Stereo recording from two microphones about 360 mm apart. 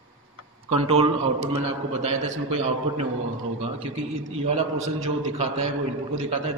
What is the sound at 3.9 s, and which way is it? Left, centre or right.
Speech, right.